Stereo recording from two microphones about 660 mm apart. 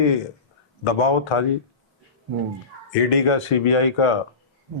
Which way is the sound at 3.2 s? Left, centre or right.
Left.